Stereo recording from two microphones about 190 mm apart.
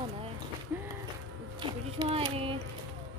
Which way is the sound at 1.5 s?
25° right (ahead or behind).